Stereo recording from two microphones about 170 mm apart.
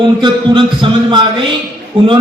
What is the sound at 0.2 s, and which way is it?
A man's voice, 30° right (ahead or behind).